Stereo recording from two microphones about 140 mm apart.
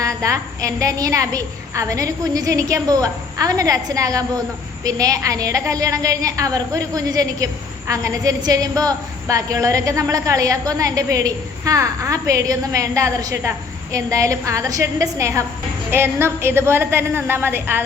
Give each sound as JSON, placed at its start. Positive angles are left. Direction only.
{"t": 0.0, "sound": "a woman's voice", "side_deg": -25}